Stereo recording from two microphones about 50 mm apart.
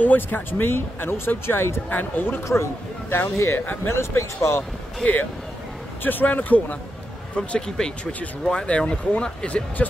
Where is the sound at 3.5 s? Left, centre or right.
Left.